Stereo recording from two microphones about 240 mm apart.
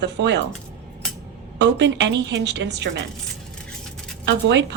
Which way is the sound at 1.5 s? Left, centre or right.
Right.